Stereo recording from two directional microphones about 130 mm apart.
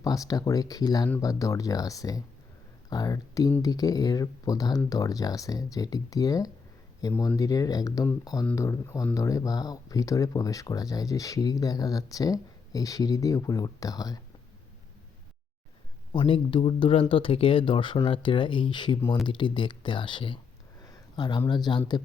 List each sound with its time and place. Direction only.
0.0 s speech: 30° left (ahead or behind)
16.1 s speech: 40° left (ahead or behind)